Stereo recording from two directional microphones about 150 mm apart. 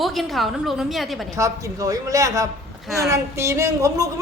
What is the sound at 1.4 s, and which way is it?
A woman's voice, 20° right (ahead or behind).